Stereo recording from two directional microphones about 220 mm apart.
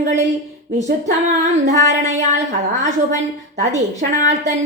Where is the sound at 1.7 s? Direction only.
35° right (ahead or behind).